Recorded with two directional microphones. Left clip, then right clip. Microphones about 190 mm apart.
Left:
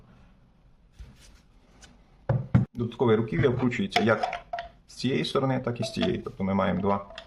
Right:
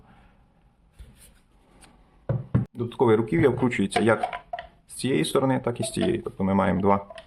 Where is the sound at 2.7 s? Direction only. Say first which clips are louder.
Right 4 dB; 20° right (ahead or behind).